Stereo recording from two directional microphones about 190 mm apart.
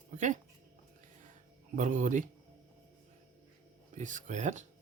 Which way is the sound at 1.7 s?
40° right (ahead or behind).